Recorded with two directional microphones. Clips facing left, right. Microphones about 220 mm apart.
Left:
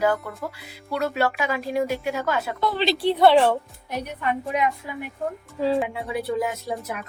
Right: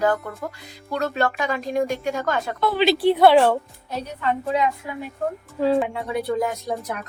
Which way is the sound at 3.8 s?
15° left (ahead or behind).